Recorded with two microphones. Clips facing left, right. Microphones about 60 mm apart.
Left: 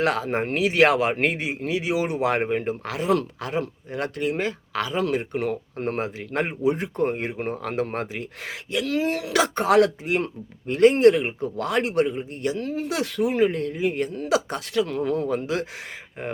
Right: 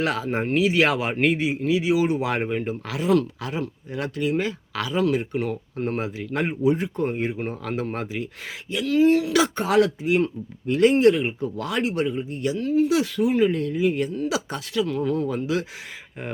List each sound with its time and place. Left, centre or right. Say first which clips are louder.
0.0 s speech: left 1 dB; left
10.7 s speech: left 2 dB; left
10.9 s speech: left 1 dB; left